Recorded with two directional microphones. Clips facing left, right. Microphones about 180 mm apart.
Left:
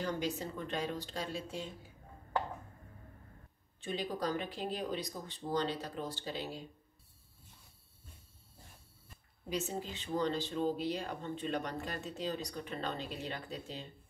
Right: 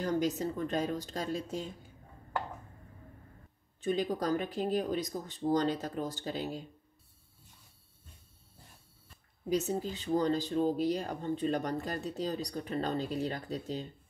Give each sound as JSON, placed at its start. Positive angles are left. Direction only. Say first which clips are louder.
{"t": 0.0, "sound": "speech", "louder": "right 6 dB", "side_deg": -40}
{"t": 3.8, "sound": "speech", "louder": "right 5 dB", "side_deg": -45}
{"t": 9.5, "sound": "speech", "louder": "right 6 dB", "side_deg": -40}